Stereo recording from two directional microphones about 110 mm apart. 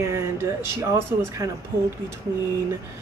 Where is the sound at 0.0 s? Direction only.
25° right (ahead or behind).